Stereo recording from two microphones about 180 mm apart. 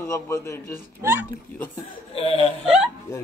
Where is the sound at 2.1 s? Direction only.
35° left (ahead or behind).